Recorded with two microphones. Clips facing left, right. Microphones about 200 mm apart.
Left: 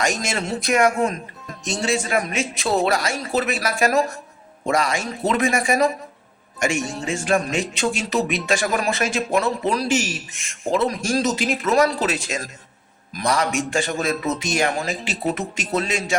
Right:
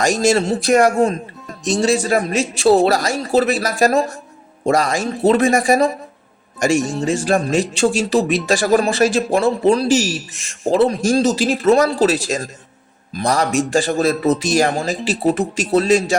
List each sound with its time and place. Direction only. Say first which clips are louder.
0.0 s speech: right 9 dB; 35° right (ahead or behind)